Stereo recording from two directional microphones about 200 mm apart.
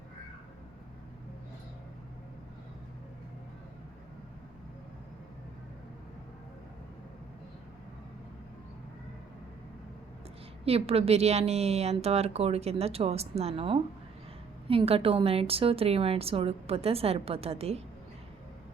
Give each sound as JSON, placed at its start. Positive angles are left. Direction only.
{"t": 10.7, "sound": "a woman's voice", "side_deg": -30}